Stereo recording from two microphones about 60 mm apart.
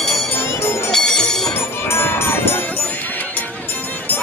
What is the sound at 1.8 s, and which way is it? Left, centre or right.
Music, left.